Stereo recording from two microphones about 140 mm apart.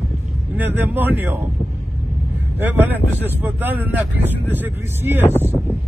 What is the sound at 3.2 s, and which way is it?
Speech, 15° right (ahead or behind).